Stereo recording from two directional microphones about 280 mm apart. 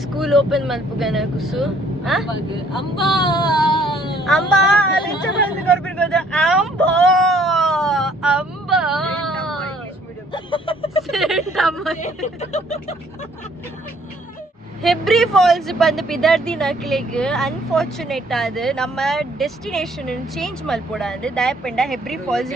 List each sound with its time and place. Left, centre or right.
0.2 s speech: centre
2.7 s child singing: centre
3.8 s a sound: centre
5.8 s vehicle: centre
10.3 s a sound: centre
11.1 s speech: centre
11.9 s speech: left
14.8 s speech: centre